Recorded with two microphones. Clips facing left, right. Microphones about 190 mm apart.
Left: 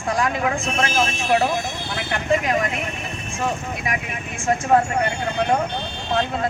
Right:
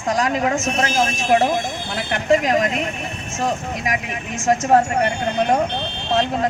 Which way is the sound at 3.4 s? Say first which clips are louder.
Right 3 dB; 40° right (ahead or behind).